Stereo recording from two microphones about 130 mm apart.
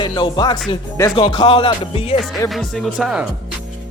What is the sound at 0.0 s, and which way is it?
Speech, 35° left (ahead or behind).